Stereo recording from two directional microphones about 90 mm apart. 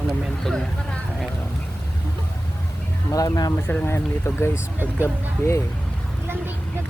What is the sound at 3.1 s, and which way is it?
Speech, 40° left (ahead or behind).